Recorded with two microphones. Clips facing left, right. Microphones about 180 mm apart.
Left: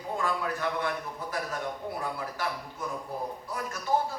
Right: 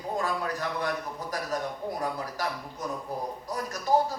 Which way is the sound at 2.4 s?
40° right (ahead or behind).